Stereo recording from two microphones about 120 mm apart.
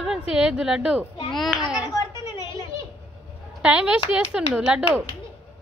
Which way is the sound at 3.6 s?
10° right (ahead or behind).